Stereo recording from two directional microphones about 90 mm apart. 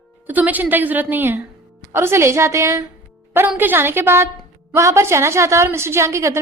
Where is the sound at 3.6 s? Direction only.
25° right (ahead or behind).